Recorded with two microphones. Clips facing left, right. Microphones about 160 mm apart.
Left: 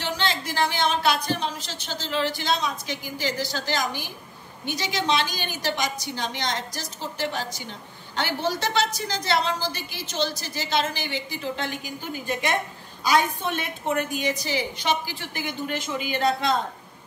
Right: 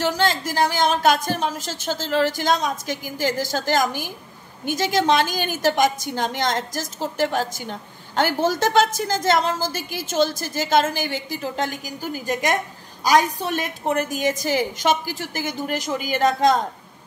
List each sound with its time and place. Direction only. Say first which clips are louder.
0.0 s a woman's voice: right 6 dB; 45° right (ahead or behind)